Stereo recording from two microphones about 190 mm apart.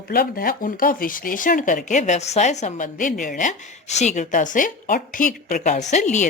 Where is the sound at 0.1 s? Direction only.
50° left (ahead or behind).